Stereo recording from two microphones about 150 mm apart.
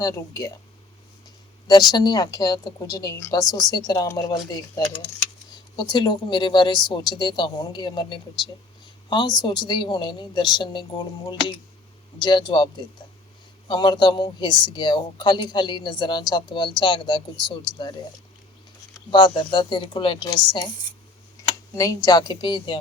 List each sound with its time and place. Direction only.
0.0 s speech: 25° left (ahead or behind)
1.6 s speech: 30° left (ahead or behind)
5.7 s a woman's voice: 30° left (ahead or behind)
18.9 s a woman's voice: 30° left (ahead or behind)
21.8 s a woman's voice: 25° left (ahead or behind)